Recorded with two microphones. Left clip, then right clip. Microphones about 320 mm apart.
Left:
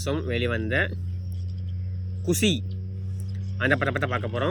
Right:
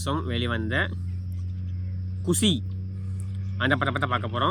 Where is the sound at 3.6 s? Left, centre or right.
Right.